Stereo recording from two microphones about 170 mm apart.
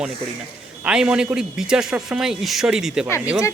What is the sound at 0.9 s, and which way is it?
A man's voice, 5° right (ahead or behind).